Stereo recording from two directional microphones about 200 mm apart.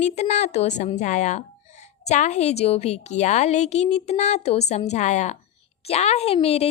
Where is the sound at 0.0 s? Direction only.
35° left (ahead or behind).